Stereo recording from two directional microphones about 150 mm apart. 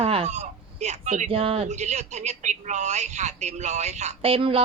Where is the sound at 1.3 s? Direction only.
40° right (ahead or behind).